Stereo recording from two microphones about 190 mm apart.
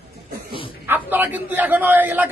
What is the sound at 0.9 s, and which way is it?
A man's voice, 10° right (ahead or behind).